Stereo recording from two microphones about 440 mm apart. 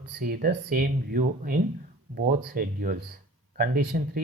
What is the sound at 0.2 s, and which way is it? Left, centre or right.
Speech, centre.